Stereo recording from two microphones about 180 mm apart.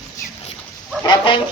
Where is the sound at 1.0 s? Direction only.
25° left (ahead or behind).